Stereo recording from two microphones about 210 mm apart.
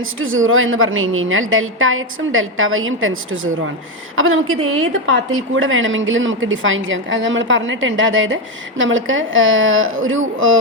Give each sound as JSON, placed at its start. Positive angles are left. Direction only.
{"t": 0.0, "sound": "a woman's voice", "side_deg": -70}
{"t": 5.0, "sound": "a woman's voice", "side_deg": -70}